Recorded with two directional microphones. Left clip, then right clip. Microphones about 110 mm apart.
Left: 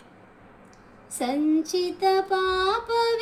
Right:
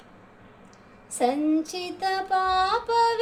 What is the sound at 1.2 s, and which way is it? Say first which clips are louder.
Child singing: right 1 dB; 30° right (ahead or behind).